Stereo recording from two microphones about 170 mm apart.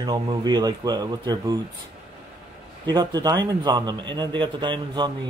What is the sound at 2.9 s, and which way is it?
Speech, 25° right (ahead or behind).